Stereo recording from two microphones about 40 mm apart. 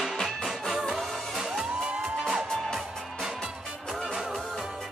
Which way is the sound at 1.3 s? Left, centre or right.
Centre.